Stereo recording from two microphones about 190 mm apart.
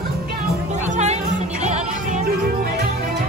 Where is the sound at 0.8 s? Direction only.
35° right (ahead or behind).